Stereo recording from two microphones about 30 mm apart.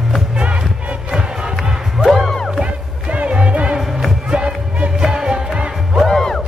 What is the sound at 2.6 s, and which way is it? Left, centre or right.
Music, right.